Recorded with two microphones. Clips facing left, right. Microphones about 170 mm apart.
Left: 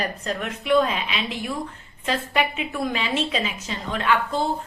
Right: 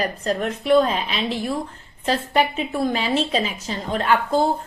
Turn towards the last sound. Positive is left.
turn(degrees=-40)  # may be behind; listen again after turning